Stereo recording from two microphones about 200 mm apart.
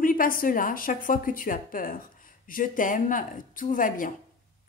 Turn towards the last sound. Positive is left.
turn(degrees=45)  # may be behind; listen again after turning